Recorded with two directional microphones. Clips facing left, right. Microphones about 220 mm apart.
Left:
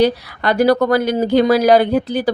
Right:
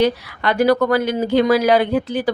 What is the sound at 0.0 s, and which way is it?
Speech, 35° left (ahead or behind).